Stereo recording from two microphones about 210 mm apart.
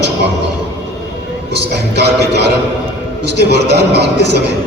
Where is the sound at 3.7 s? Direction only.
55° right (ahead or behind).